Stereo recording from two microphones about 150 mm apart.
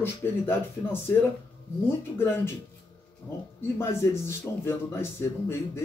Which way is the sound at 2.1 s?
15° left (ahead or behind).